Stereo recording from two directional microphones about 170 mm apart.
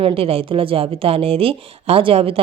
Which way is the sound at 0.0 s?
35° right (ahead or behind).